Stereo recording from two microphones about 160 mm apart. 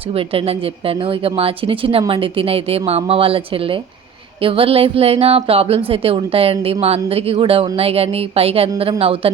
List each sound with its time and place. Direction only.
0.1 s a woman's voice: 35° right (ahead or behind)